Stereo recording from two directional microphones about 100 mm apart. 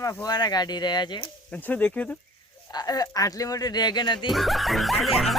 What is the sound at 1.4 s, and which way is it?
Speech, 15° left (ahead or behind).